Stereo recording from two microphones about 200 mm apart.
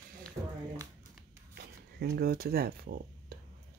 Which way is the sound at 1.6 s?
55° right (ahead or behind).